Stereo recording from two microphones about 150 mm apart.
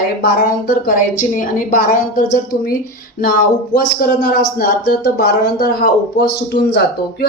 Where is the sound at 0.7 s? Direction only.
70° left (ahead or behind).